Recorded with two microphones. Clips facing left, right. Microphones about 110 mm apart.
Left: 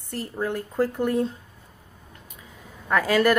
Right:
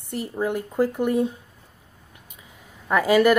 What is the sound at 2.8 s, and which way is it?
Speech, 10° right (ahead or behind).